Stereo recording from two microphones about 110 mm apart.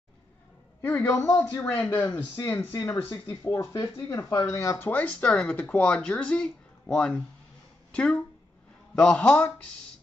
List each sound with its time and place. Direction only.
0.8 s a man's voice: 20° left (ahead or behind)
2.7 s speech: 35° left (ahead or behind)
3.0 s speech: 20° left (ahead or behind)